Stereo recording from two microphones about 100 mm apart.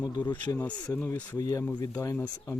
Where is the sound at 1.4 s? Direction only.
35° left (ahead or behind).